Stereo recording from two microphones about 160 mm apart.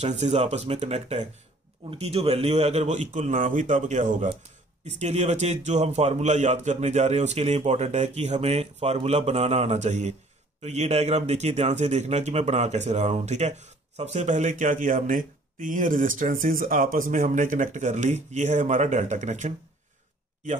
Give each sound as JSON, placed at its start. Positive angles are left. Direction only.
{"t": 0.0, "sound": "a man's voice", "side_deg": -45}